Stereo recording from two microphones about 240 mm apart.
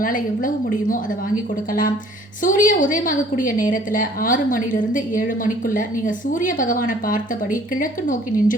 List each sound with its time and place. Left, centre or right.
0.0 s a woman's voice: left
2.4 s a woman's voice: left